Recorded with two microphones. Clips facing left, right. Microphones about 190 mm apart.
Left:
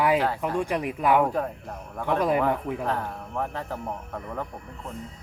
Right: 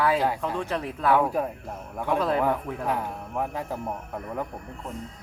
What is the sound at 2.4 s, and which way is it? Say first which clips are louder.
Speech: even; 10° right (ahead or behind).